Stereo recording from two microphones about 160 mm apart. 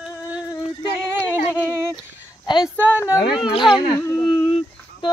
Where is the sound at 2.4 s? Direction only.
25° left (ahead or behind).